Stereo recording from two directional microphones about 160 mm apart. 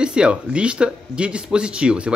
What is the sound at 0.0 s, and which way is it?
Speech, 5° right (ahead or behind).